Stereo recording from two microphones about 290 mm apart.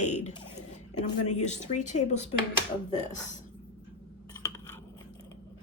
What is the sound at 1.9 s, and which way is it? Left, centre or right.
Speech, left.